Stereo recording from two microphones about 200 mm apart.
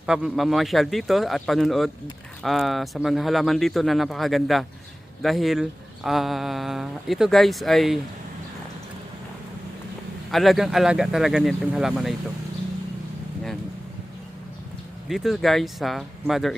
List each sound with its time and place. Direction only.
0.0 s speech: 5° right (ahead or behind)
10.3 s speech: centre (ahead or behind)
15.1 s speech: centre (ahead or behind)